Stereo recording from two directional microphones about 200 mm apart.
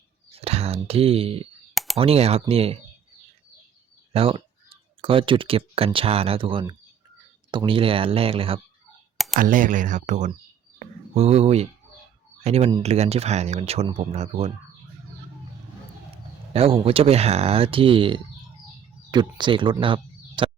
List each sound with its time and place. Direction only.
0.3 s speech: 30° right (ahead or behind)
1.7 s clicking: centre (ahead or behind)
2.0 s speech: 30° right (ahead or behind)
4.1 s speech: 30° right (ahead or behind)
9.1 s clicking: centre (ahead or behind)
9.4 s speech: 40° right (ahead or behind)
16.5 s speech: 30° right (ahead or behind)